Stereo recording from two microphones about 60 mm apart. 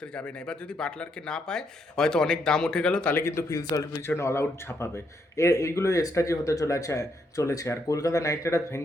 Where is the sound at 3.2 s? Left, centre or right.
Left.